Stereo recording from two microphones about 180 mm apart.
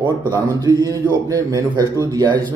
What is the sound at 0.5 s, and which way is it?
Speech, 20° right (ahead or behind).